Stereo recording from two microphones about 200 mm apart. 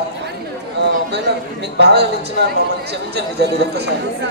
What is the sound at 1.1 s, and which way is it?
A man's voice, 55° right (ahead or behind).